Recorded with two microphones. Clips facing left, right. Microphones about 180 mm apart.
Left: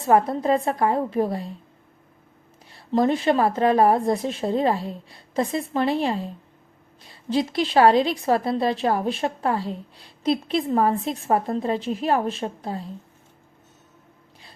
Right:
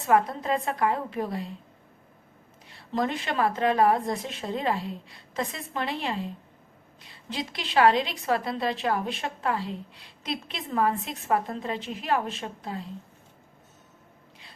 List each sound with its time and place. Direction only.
0.0 s a woman's voice: 35° left (ahead or behind)
2.6 s a woman's voice: 35° left (ahead or behind)